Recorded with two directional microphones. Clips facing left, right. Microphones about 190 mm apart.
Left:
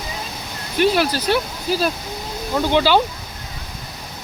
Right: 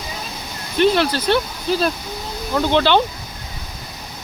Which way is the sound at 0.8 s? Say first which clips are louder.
Right 1 dB; 10° left (ahead or behind).